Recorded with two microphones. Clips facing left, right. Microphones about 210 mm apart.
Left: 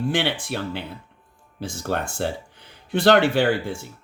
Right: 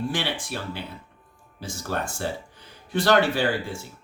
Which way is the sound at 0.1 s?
60° left (ahead or behind).